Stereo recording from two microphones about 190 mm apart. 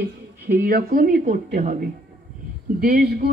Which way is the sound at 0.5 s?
55° right (ahead or behind).